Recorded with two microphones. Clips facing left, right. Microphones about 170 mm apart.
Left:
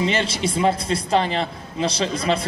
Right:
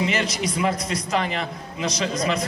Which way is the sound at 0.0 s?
30° left (ahead or behind).